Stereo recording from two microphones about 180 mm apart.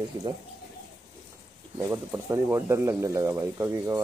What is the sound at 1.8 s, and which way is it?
Speech, 15° right (ahead or behind).